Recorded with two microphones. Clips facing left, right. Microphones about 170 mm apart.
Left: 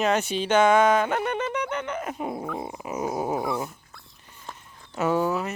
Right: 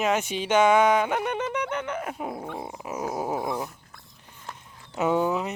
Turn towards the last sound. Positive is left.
turn(degrees=-15)  # may be behind; listen again after turning